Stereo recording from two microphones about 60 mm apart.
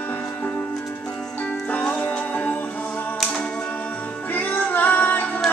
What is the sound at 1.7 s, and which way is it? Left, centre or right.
Music, left.